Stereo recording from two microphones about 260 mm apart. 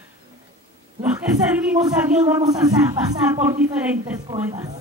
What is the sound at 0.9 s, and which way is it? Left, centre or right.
A man's voice, centre.